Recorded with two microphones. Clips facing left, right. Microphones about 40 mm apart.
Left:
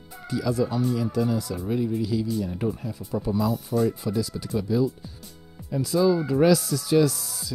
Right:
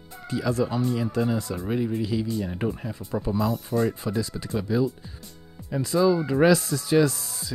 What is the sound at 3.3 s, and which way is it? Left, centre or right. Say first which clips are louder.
Speech: left 1 dB; centre.